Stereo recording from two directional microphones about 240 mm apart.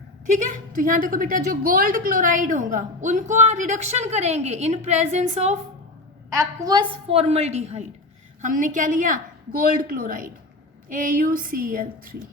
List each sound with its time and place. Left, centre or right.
0.3 s a woman's voice: right
6.3 s a woman's voice: centre; by 12.1 s right